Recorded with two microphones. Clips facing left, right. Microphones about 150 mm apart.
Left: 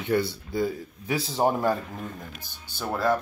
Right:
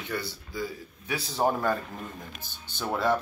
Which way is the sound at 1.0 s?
25° left (ahead or behind).